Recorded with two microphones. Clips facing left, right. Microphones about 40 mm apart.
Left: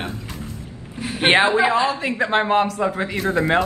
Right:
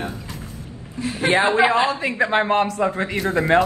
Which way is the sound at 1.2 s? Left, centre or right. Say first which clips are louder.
Left 2 dB; left.